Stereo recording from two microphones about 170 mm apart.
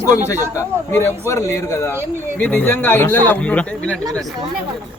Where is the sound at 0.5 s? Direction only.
15° left (ahead or behind).